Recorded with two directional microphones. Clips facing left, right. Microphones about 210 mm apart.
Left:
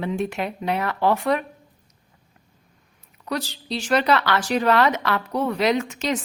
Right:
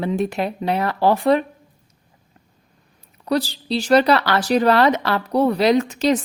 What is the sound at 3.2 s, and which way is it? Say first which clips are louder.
A woman's voice: right 7 dB; 35° right (ahead or behind).